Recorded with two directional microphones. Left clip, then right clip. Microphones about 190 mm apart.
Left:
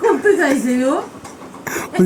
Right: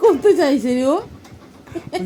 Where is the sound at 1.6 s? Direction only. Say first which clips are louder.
Left 8 dB; 50° left (ahead or behind).